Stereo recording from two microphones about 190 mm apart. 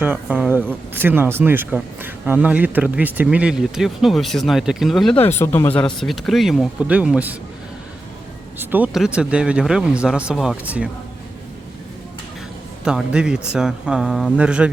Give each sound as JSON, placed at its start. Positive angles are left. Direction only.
{"t": 0.0, "sound": "speech", "side_deg": -10}
{"t": 5.1, "sound": "speech", "side_deg": 30}
{"t": 5.4, "sound": "speech", "side_deg": 10}
{"t": 8.5, "sound": "speech", "side_deg": -10}
{"t": 12.8, "sound": "speech", "side_deg": -5}